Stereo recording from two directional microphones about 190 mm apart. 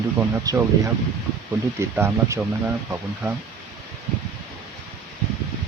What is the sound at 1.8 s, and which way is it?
Speech, 15° right (ahead or behind).